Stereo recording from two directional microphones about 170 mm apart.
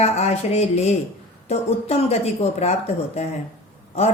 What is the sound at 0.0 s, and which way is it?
Speech, 40° left (ahead or behind).